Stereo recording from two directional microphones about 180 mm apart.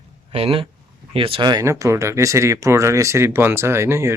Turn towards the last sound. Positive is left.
turn(degrees=-15)  # may be behind; listen again after turning